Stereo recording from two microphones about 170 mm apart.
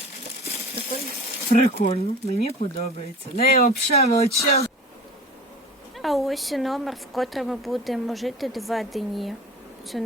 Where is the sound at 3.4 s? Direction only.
60° left (ahead or behind).